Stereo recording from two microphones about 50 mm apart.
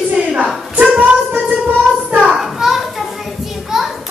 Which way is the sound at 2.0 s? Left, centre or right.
Right.